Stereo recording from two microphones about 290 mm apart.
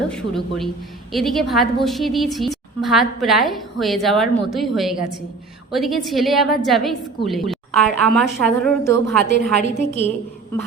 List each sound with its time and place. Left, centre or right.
0.1 s a woman's voice: centre
9.3 s a woman's voice: left